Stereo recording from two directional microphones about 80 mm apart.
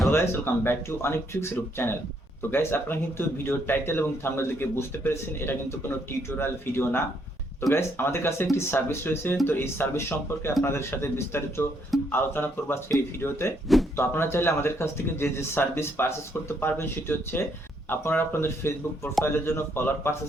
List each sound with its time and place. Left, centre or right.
0.1 s speech: left